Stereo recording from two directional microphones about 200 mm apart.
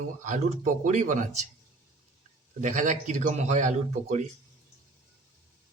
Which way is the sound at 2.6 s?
40° right (ahead or behind).